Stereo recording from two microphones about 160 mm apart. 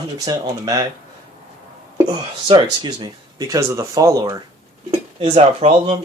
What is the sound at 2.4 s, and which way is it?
Speech, 30° right (ahead or behind).